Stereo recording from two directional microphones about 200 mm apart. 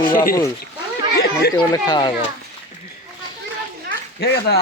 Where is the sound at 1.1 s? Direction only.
55° left (ahead or behind).